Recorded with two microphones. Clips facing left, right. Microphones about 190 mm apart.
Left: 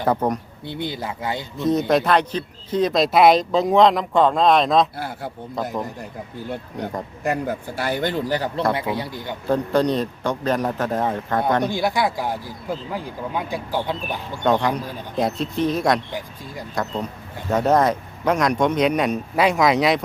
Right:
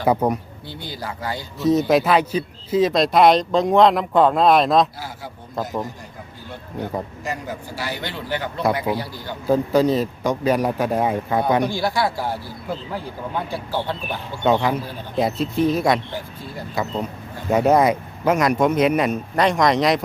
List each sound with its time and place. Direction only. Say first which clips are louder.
0.0 s a man's voice: right 2 dB; 10° right (ahead or behind)
0.7 s speech: left 4 dB; 25° left (ahead or behind)
1.5 s speech: right 2 dB; 5° right (ahead or behind)
4.9 s speech: left 4 dB; 60° left (ahead or behind)
5.6 s speech: even; centre (ahead or behind)
7.3 s a man's voice: left 5 dB; 55° left (ahead or behind); by 8.6 s 40° left (ahead or behind)
9.0 s speech: left 1 dB; 20° left (ahead or behind)
9.5 s a man's voice: right 2 dB; 5° right (ahead or behind)
11.7 s speech: even; 20° left (ahead or behind)
14.4 s speech: right 1 dB; 5° right (ahead or behind)